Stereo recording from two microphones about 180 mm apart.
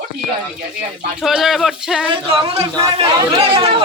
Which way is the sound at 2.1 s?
25° right (ahead or behind).